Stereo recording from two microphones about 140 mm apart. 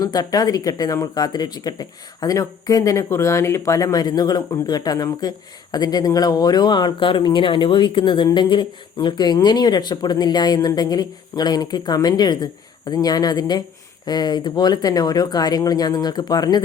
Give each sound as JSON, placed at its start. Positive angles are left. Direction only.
{"t": 0.0, "sound": "speech", "side_deg": 25}